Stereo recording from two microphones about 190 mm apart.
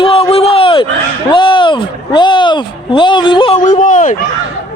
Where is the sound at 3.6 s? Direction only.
45° left (ahead or behind).